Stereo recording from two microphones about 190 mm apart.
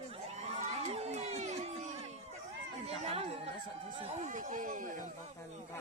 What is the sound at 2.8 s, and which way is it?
Chatter, 30° right (ahead or behind).